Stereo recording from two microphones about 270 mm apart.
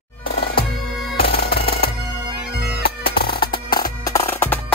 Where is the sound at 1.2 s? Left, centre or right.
Left.